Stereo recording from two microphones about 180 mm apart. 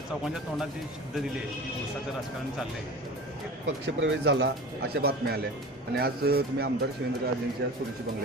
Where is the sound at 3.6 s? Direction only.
85° right; by 7.8 s 65° right (ahead or behind).